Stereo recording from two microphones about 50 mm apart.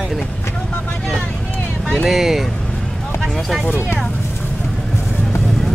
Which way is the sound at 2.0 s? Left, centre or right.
Centre.